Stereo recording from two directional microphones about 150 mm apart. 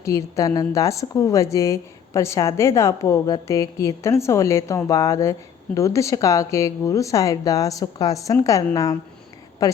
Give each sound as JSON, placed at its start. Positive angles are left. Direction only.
{"t": 0.0, "sound": "a woman's voice", "side_deg": 20}